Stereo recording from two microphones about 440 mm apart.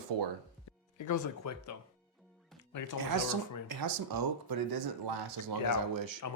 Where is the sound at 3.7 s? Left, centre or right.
Right.